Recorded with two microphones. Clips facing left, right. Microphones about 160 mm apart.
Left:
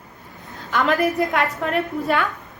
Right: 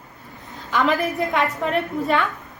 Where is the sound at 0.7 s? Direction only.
Centre (ahead or behind).